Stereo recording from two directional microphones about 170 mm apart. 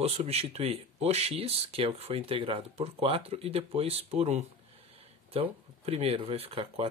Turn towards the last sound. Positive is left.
turn(degrees=-35)  # may be behind; listen again after turning